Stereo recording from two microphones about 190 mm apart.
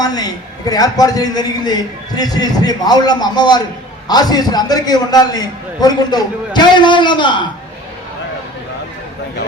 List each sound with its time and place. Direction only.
0.0 s a man's voice: 20° left (ahead or behind)